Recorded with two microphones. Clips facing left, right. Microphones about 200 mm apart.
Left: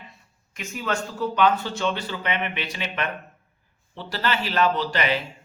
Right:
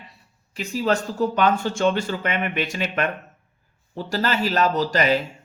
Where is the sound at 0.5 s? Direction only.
35° right (ahead or behind).